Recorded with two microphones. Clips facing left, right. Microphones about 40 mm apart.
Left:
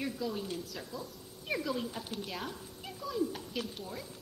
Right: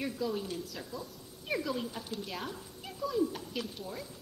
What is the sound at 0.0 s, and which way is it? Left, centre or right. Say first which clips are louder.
A woman's voice: right 2 dB; centre.